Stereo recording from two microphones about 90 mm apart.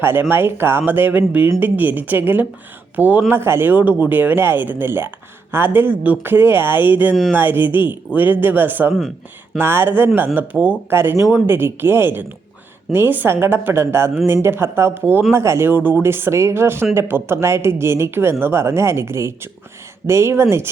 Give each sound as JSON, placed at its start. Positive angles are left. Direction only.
{"t": 0.0, "sound": "speech", "side_deg": -25}